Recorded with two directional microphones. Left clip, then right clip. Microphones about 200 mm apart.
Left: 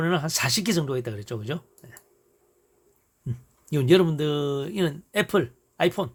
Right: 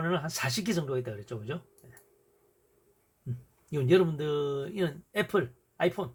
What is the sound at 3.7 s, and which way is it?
Speech, 55° left (ahead or behind).